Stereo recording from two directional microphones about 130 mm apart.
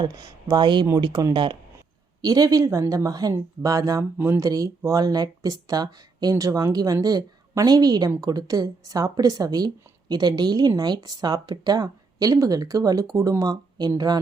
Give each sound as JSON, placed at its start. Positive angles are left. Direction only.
{"t": 0.0, "sound": "speech", "side_deg": -30}
{"t": 2.2, "sound": "speech", "side_deg": -30}